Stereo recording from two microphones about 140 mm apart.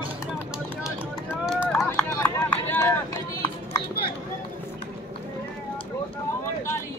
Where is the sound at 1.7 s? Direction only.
5° left (ahead or behind).